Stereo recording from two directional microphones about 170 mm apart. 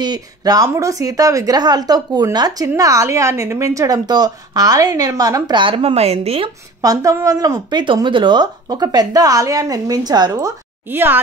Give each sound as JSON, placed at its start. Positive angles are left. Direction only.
{"t": 0.0, "sound": "speech", "side_deg": -25}
{"t": 6.8, "sound": "speech", "side_deg": -20}
{"t": 10.9, "sound": "speech", "side_deg": -10}